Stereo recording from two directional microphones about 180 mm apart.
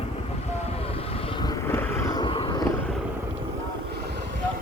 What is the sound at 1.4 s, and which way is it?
Vehicle, 15° left (ahead or behind).